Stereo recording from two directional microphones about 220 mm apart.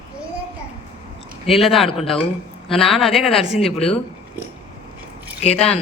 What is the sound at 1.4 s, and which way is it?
Speech, centre (ahead or behind).